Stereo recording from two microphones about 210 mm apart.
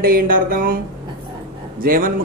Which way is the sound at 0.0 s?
45° right (ahead or behind).